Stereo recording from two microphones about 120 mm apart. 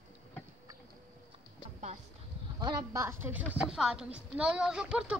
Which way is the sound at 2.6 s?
25° right (ahead or behind).